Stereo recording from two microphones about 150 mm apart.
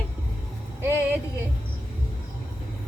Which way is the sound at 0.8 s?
15° right (ahead or behind).